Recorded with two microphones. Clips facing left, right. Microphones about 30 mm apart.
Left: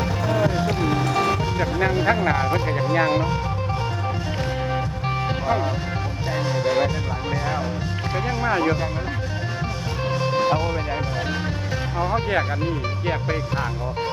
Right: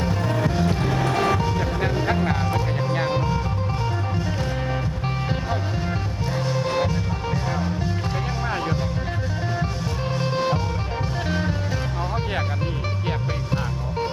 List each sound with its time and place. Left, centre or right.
0.9 s music: left
2.8 s music: centre
6.7 s music: centre
10.2 s music: centre